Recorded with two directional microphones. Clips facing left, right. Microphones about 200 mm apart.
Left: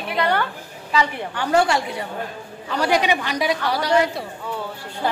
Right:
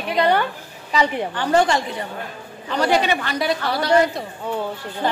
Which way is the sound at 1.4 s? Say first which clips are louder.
Even; 10° left (ahead or behind).